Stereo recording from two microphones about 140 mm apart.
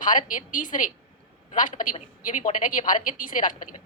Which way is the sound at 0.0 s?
70° left (ahead or behind).